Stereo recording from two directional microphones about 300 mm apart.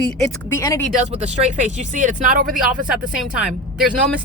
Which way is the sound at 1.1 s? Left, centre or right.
Right.